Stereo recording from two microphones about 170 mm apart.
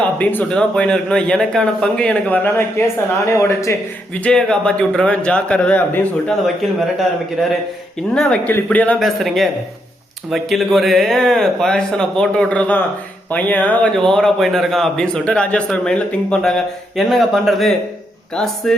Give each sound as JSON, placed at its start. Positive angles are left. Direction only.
{"t": 0.0, "sound": "a man's voice", "side_deg": 10}
{"t": 4.2, "sound": "a man's voice", "side_deg": 5}
{"t": 8.1, "sound": "a man's voice", "side_deg": 5}